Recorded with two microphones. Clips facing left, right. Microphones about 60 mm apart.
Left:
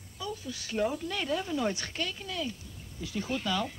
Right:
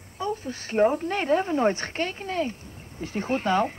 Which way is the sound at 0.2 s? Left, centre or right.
Right.